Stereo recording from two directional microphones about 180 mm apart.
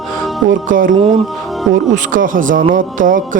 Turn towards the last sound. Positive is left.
turn(degrees=-45)  # may be behind; listen again after turning